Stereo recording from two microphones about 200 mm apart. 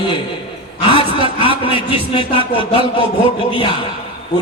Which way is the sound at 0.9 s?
25° left (ahead or behind).